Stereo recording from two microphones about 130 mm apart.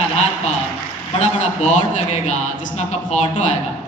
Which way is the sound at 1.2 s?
65° left (ahead or behind).